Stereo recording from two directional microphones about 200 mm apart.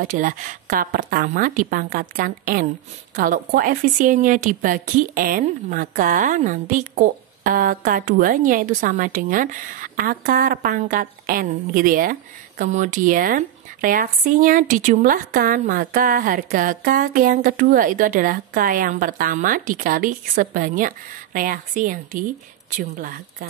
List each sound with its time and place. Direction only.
0.0 s a woman's voice: 40° right (ahead or behind)